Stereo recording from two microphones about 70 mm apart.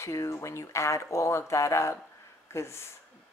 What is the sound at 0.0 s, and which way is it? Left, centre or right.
Speech, left.